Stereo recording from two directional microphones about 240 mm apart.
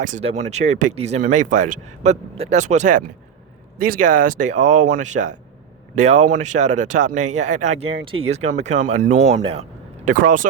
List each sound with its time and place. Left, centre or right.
0.0 s speech: right